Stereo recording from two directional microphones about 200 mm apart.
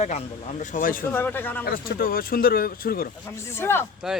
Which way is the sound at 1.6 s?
50° left (ahead or behind).